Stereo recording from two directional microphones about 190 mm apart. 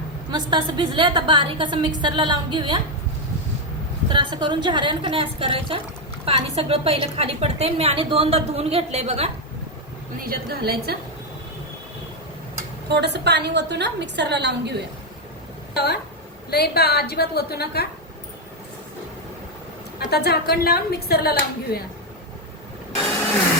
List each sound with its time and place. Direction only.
0.3 s a woman's voice: 25° right (ahead or behind)
4.1 s a woman's voice: 25° right (ahead or behind)
10.2 s a woman's voice: 50° right (ahead or behind)
12.9 s a woman's voice: 60° right (ahead or behind)
15.7 s speech: 60° left (ahead or behind)
20.1 s speech: 55° left (ahead or behind)